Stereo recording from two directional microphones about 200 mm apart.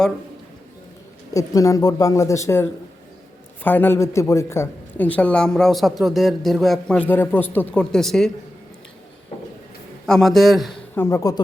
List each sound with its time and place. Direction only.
1.3 s a man's voice: 15° left (ahead or behind)
10.1 s a man's voice: centre (ahead or behind)
10.9 s a man's voice: 15° left (ahead or behind)